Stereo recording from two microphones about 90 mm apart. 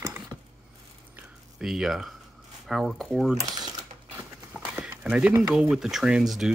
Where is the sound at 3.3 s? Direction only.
50° right (ahead or behind).